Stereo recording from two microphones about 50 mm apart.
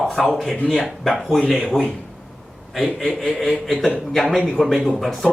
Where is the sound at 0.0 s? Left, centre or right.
Centre.